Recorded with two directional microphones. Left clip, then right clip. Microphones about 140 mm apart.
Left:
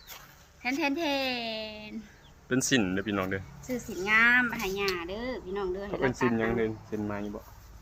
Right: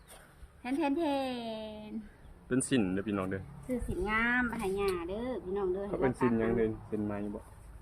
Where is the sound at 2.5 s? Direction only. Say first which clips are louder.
Left 4 dB; 10° left (ahead or behind).